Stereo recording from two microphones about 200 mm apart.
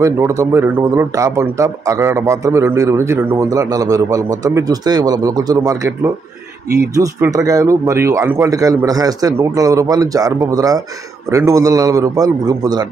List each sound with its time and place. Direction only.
0.0 s a man's voice: 15° right (ahead or behind)